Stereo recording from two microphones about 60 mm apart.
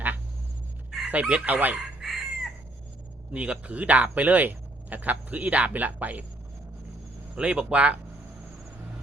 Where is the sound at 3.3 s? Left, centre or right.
Right.